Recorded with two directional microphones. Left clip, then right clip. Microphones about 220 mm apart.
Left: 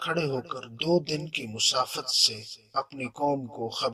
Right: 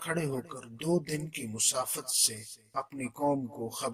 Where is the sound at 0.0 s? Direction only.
40° right (ahead or behind).